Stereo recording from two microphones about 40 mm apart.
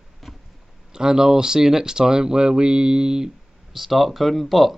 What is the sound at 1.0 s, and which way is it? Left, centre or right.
Speech, centre.